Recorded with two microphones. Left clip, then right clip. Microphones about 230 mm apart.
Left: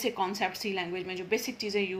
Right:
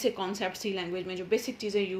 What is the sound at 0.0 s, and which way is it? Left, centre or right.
A woman's voice, left.